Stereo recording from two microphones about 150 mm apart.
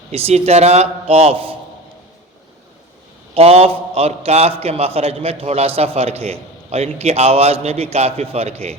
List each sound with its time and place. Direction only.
0.1 s a man's voice: 40° right (ahead or behind)
3.3 s a man's voice: 40° right (ahead or behind)